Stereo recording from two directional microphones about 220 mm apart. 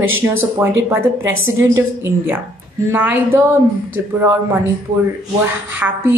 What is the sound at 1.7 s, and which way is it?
Speech, 10° right (ahead or behind).